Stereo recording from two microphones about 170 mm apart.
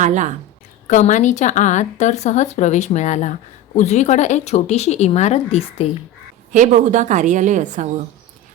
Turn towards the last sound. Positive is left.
turn(degrees=-45)  # may be behind; listen again after turning